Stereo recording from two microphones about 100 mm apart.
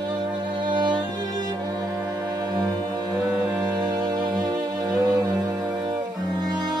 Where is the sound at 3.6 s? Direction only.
45° right (ahead or behind).